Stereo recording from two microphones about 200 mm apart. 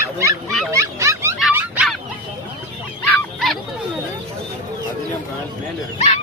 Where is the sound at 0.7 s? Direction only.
15° right (ahead or behind).